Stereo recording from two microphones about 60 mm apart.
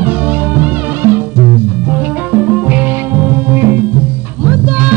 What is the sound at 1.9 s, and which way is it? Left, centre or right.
Music, right.